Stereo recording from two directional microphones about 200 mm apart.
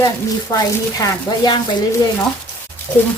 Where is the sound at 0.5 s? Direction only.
20° left (ahead or behind).